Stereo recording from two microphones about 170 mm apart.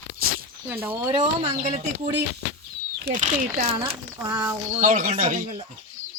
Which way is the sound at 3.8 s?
25° right (ahead or behind).